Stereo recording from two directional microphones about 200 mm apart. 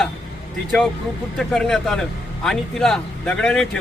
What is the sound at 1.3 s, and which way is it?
A man's voice, centre (ahead or behind).